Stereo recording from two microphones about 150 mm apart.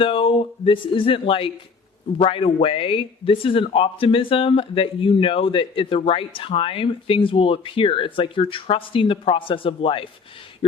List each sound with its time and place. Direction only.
0.0 s speech: 35° left (ahead or behind)